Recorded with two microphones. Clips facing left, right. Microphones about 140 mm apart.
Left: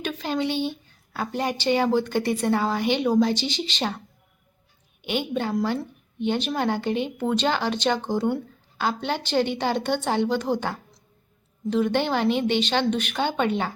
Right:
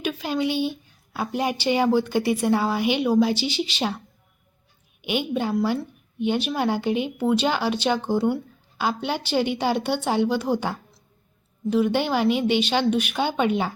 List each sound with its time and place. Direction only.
0.0 s a woman's voice: 10° right (ahead or behind)
5.0 s a woman's voice: 15° right (ahead or behind)